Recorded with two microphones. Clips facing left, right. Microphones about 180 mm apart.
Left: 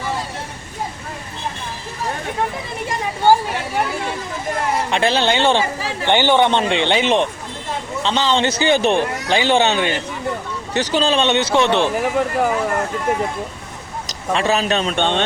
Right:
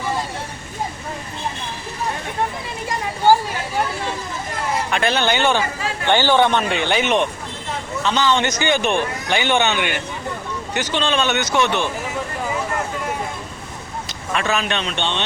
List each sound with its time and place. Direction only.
4.9 s a man's voice: 30° left (ahead or behind)
14.3 s speech: 35° left (ahead or behind)